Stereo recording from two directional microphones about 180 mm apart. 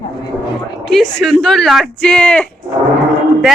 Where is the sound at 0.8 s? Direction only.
Centre (ahead or behind).